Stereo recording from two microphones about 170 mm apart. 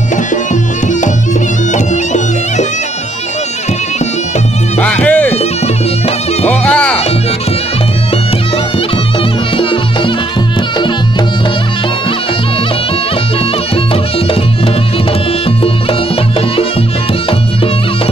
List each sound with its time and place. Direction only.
0.1 s music: 45° left (ahead or behind)
1.7 s music: 45° left (ahead or behind)
4.7 s music: 10° left (ahead or behind)
6.4 s music: 10° left (ahead or behind)
9.6 s music: 30° left (ahead or behind)
15.4 s music: 35° left (ahead or behind)